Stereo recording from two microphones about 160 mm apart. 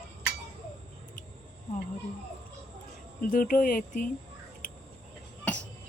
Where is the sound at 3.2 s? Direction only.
60° left (ahead or behind).